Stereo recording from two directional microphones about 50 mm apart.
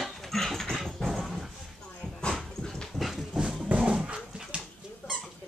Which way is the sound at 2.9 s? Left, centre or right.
Centre.